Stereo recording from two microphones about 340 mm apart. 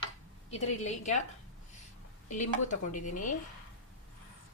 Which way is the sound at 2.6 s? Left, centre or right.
Left.